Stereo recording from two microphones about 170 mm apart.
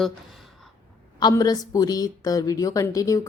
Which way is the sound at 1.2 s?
25° left (ahead or behind).